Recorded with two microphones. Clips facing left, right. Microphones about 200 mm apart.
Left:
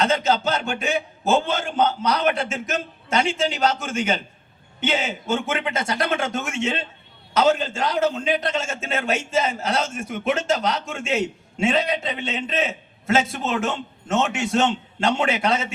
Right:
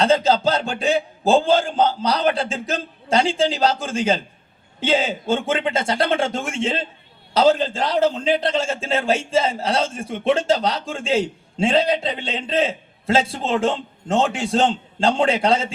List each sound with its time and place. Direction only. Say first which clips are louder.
0.0 s a man's voice: right 4 dB; 30° right (ahead or behind)